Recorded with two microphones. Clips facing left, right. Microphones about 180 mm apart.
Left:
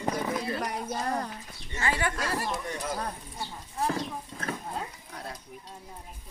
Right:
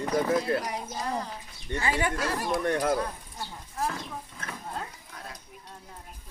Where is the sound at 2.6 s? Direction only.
65° right (ahead or behind).